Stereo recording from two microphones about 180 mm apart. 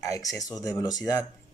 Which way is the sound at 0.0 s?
20° left (ahead or behind).